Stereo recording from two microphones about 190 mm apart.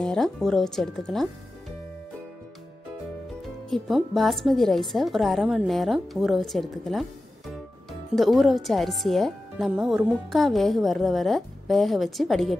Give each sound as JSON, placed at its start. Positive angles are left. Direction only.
{"t": 0.0, "sound": "speech", "side_deg": 5}
{"t": 3.7, "sound": "speech", "side_deg": 0}